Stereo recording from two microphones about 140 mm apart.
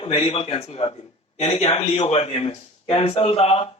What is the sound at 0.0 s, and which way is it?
Speech, 45° left (ahead or behind).